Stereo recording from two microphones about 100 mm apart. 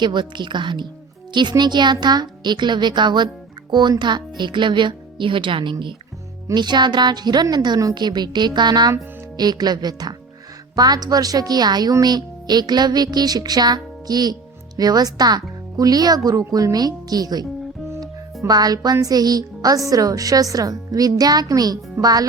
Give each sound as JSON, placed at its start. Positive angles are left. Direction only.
{"t": 0.0, "sound": "a woman's voice", "side_deg": -50}
{"t": 18.4, "sound": "a woman's voice", "side_deg": -40}